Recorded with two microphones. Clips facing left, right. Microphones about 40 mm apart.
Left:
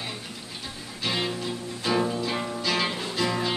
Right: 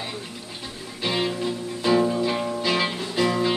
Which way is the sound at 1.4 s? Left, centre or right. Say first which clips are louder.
Right 5 dB; centre.